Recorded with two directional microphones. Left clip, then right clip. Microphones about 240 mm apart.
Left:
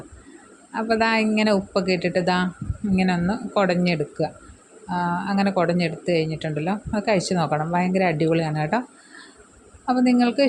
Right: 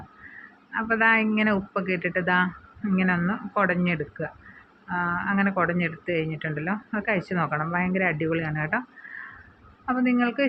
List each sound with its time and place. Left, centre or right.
0.7 s speech: left
9.8 s a woman's voice: left